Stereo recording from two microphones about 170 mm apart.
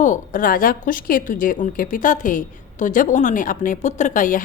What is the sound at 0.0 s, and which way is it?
A woman's voice, 50° left (ahead or behind).